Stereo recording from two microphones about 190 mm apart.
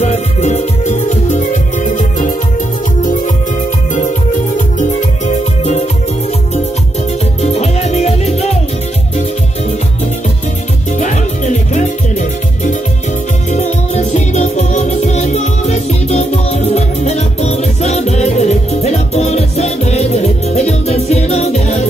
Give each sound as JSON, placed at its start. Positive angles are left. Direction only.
{"t": 0.0, "sound": "music", "side_deg": 35}
{"t": 4.7, "sound": "music", "side_deg": 40}
{"t": 7.4, "sound": "music", "side_deg": 35}
{"t": 10.9, "sound": "music", "side_deg": 40}